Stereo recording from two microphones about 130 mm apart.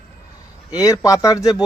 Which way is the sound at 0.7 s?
25° left (ahead or behind).